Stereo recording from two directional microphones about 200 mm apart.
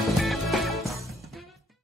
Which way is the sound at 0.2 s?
Centre (ahead or behind).